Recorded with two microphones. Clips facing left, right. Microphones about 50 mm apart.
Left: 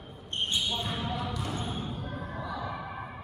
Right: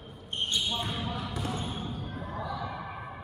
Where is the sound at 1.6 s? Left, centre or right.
Centre.